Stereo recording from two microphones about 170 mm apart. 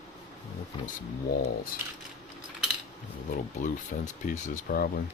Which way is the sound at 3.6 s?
45° left (ahead or behind).